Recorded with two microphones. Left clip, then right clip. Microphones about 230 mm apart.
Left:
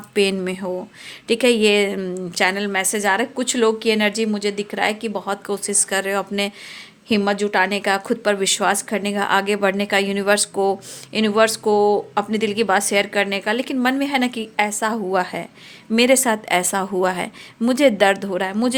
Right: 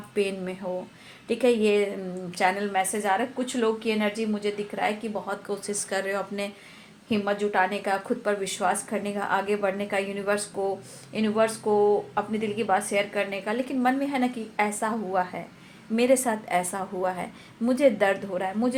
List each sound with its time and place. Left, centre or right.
0.1 s a woman's voice: left
7.1 s a woman's voice: left